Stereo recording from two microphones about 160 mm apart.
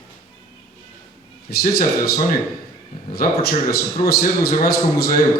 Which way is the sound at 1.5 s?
70° left (ahead or behind).